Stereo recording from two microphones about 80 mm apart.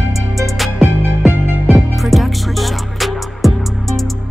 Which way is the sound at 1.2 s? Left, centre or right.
Centre.